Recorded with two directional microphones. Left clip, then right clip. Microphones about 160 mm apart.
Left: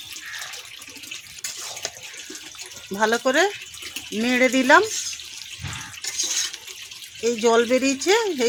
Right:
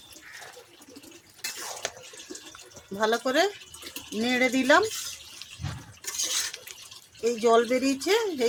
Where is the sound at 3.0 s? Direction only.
60° left (ahead or behind).